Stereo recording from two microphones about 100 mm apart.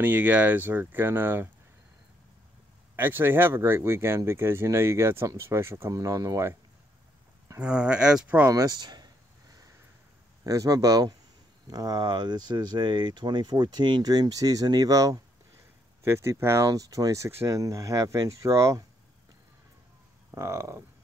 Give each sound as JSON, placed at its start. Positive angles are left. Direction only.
{"t": 0.0, "sound": "speech", "side_deg": -15}
{"t": 3.0, "sound": "speech", "side_deg": -20}
{"t": 7.5, "sound": "speech", "side_deg": -10}
{"t": 8.5, "sound": "a sound", "side_deg": -35}
{"t": 10.4, "sound": "speech", "side_deg": -35}
{"t": 16.0, "sound": "speech", "side_deg": -25}
{"t": 20.2, "sound": "a sound", "side_deg": -30}